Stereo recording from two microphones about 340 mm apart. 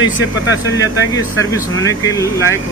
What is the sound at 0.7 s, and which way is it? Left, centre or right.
Speech, centre.